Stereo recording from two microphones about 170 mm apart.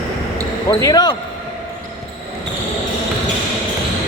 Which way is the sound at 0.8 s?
20° left (ahead or behind).